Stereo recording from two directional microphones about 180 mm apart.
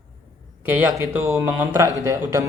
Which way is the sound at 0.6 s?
10° right (ahead or behind).